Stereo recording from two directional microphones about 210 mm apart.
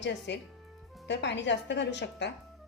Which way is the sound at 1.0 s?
55° left (ahead or behind).